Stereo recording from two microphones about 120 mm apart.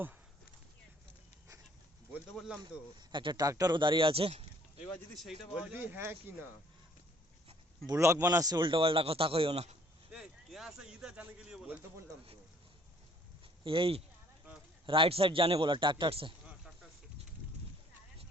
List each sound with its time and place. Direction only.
2.6 s speech: 40° right (ahead or behind); by 4.4 s 55° right (ahead or behind)
4.9 s a man's voice: centre (ahead or behind)
5.7 s speech: 15° right (ahead or behind)
7.9 s speech: 25° right (ahead or behind)
8.4 s a man's voice: 40° right (ahead or behind)
10.1 s a man's voice: 5° right (ahead or behind)
13.7 s a man's voice: 50° right (ahead or behind)